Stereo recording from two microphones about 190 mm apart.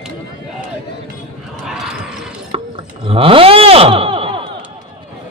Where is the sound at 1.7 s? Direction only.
5° right (ahead or behind).